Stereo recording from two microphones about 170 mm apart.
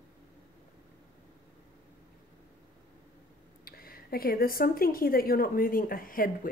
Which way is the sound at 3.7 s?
60° left (ahead or behind).